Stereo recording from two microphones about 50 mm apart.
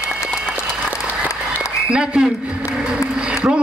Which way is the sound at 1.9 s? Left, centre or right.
Right.